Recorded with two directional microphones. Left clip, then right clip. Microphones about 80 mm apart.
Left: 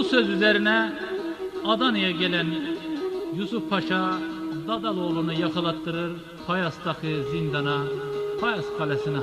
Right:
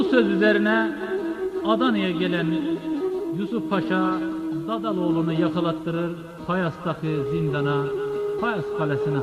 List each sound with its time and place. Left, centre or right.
0.0 s a man's voice: left
3.5 s a man's voice: left
7.3 s a man's voice: left